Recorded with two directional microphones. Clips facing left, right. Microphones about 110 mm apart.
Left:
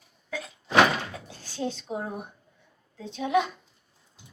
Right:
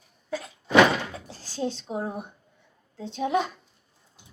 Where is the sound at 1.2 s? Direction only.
30° right (ahead or behind).